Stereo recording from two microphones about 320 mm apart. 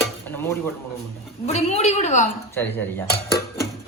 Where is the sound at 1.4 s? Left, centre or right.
Centre.